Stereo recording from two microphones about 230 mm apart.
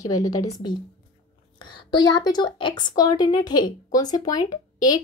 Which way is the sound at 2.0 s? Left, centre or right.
Centre.